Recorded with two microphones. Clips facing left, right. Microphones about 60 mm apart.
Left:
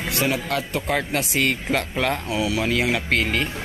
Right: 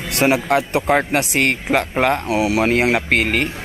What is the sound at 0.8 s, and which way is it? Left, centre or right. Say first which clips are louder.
Speech: right 6 dB; right.